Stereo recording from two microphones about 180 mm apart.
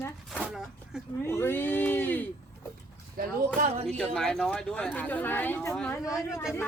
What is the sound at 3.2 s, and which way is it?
Speech, 55° right (ahead or behind).